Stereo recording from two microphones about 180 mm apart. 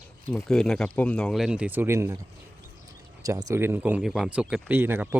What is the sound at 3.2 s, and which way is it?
Speech, 20° right (ahead or behind).